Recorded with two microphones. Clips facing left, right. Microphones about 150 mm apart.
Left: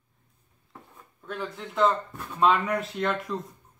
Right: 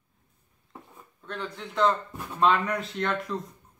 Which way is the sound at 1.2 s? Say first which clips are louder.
Left 1 dB; 5° left (ahead or behind).